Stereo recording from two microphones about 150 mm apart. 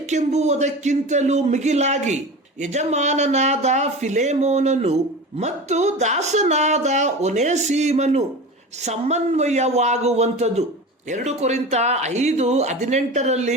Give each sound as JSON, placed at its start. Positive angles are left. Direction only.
{"t": 0.1, "sound": "speech", "side_deg": -50}